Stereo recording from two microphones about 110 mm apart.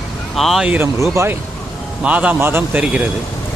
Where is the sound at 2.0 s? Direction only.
10° right (ahead or behind).